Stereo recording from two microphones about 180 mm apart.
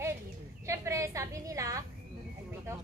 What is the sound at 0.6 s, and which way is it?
A woman's voice, 15° right (ahead or behind).